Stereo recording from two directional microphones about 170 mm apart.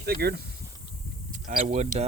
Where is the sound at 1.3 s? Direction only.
50° right (ahead or behind).